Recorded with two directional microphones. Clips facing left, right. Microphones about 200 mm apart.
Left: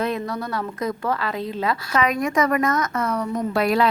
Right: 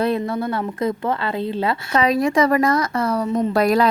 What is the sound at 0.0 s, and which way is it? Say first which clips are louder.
A woman's voice: right 5 dB; 30° right (ahead or behind).